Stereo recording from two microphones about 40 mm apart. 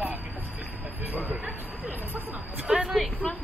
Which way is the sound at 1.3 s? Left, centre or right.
Right.